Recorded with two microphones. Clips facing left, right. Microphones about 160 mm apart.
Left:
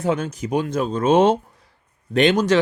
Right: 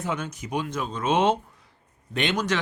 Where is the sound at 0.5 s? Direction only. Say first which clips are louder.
Left 8 dB; 50° left (ahead or behind).